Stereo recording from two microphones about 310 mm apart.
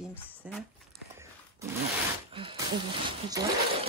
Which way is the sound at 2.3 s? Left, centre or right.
Centre.